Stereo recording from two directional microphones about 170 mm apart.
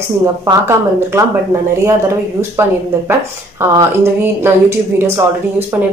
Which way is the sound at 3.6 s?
15° right (ahead or behind).